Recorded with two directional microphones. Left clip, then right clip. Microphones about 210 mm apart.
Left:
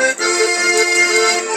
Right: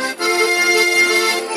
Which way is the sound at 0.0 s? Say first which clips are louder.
Left 2 dB; 60° right (ahead or behind).